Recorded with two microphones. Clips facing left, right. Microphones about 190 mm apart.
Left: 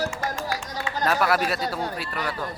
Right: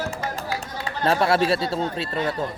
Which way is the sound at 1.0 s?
25° right (ahead or behind).